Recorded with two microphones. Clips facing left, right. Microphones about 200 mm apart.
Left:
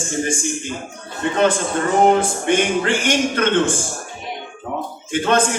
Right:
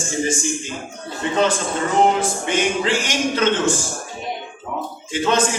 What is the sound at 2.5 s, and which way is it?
A man's voice, 55° left (ahead or behind).